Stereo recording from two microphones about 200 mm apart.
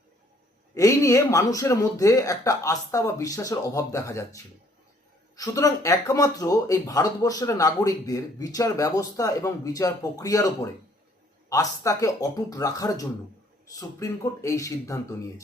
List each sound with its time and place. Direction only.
0.7 s speech: 15° left (ahead or behind)
5.4 s speech: 15° left (ahead or behind)